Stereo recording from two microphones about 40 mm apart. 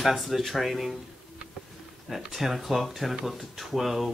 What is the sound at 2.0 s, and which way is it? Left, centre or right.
Speech, centre.